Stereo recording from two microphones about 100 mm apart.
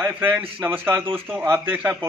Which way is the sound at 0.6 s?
20° right (ahead or behind).